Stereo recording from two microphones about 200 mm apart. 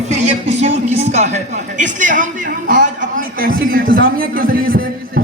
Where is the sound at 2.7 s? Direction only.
40° right (ahead or behind).